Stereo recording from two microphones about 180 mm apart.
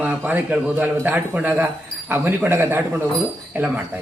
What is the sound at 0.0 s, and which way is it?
A man's voice, 5° right (ahead or behind).